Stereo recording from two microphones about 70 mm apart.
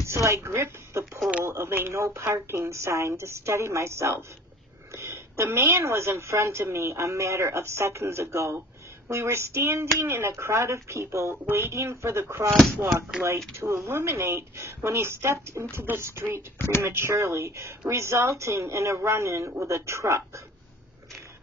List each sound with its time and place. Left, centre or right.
0.0 s a woman's voice: right
13.6 s a woman's voice: right